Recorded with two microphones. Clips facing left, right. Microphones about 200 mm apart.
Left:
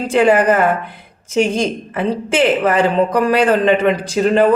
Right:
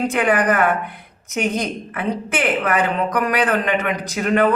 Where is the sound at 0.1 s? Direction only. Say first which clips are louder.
Left 6 dB; 30° left (ahead or behind).